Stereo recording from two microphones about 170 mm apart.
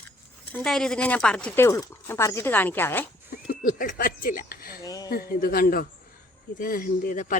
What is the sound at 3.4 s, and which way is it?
Speech, 55° left (ahead or behind).